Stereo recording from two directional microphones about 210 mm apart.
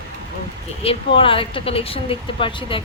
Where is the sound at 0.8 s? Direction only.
25° left (ahead or behind).